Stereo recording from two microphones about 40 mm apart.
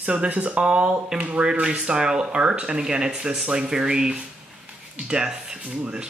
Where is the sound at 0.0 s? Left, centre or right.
Right.